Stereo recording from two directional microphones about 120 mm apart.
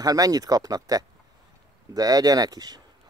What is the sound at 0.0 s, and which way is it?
Speech, 30° right (ahead or behind).